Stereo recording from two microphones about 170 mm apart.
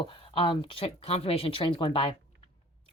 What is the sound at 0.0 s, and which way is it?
Speech, 30° left (ahead or behind).